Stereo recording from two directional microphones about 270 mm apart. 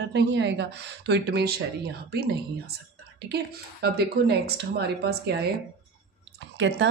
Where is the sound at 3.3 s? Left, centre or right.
Right.